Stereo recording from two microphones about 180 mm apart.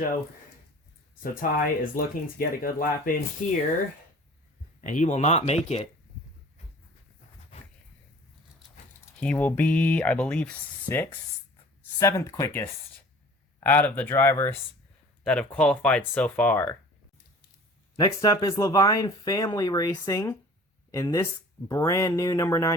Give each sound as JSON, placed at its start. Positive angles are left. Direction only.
{"t": 1.2, "sound": "speech", "side_deg": 50}
{"t": 4.8, "sound": "speech", "side_deg": 45}
{"t": 9.2, "sound": "speech", "side_deg": 10}
{"t": 17.9, "sound": "speech", "side_deg": 20}